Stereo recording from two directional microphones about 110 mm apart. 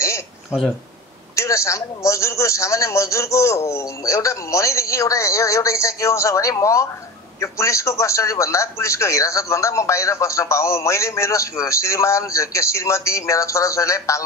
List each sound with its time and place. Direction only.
0.5 s speech: 10° right (ahead or behind)
1.3 s a man's voice: 25° left (ahead or behind)